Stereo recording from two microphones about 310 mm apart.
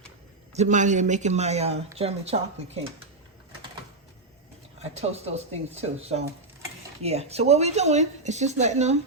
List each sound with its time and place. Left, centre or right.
0.5 s speech: right
4.8 s speech: centre